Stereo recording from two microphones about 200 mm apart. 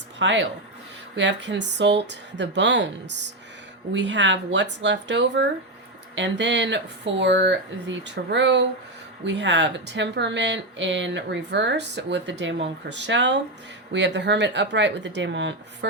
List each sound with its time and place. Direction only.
0.2 s speech: 65° right (ahead or behind)